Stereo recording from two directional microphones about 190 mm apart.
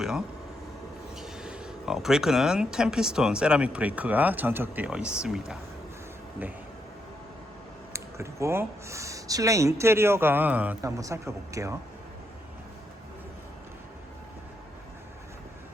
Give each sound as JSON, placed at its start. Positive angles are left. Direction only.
{"t": 0.0, "sound": "speech", "side_deg": -5}
{"t": 7.9, "sound": "speech", "side_deg": -15}